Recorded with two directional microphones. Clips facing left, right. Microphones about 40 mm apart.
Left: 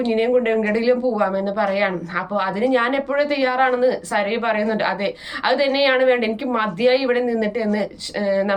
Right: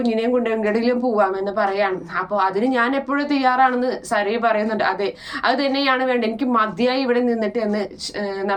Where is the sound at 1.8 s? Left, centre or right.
Left.